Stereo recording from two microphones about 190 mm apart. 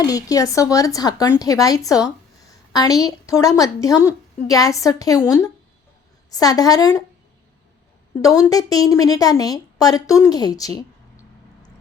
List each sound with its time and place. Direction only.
0.0 s a woman's voice: 20° left (ahead or behind)
8.2 s a woman's voice: 15° left (ahead or behind)